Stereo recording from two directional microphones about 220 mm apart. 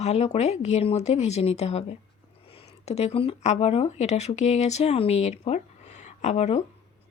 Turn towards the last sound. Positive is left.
turn(degrees=30)  # may be behind; listen again after turning